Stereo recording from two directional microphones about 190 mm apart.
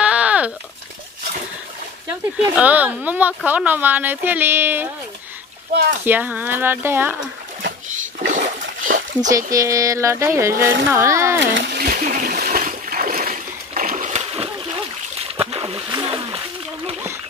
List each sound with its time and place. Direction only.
0.0 s a sound: 5° right (ahead or behind)
2.5 s speech: 10° right (ahead or behind)
6.0 s speech: 10° right (ahead or behind)
8.2 s splash: 45° right (ahead or behind)
9.5 s speech: 15° right (ahead or behind)
11.3 s splash: 65° right (ahead or behind); by 16.3 s 25° right (ahead or behind)